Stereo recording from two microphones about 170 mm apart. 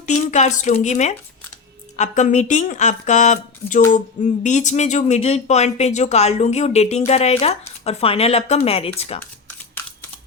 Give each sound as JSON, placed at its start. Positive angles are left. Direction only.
{"t": 0.3, "sound": "a woman's voice", "side_deg": 45}